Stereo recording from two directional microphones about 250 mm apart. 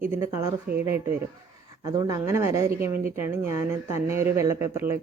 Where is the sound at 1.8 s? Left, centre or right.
Centre.